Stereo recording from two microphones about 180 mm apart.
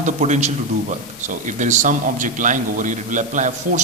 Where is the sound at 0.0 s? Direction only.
40° right (ahead or behind).